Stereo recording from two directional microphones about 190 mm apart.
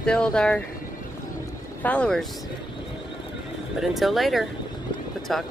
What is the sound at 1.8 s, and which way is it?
Speech, 5° left (ahead or behind).